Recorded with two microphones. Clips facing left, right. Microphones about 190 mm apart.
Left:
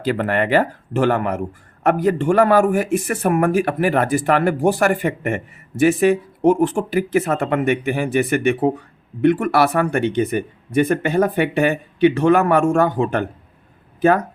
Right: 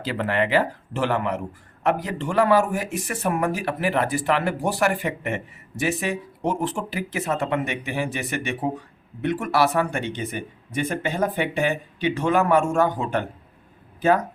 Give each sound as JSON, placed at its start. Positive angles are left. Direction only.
{"t": 0.0, "sound": "speech", "side_deg": 50}